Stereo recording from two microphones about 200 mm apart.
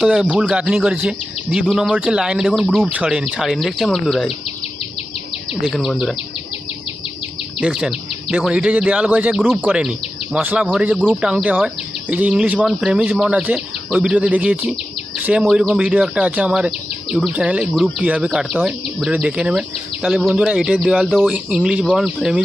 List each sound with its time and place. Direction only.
0.0 s speech: 5° right (ahead or behind)
5.6 s speech: centre (ahead or behind)
7.6 s speech: 5° right (ahead or behind)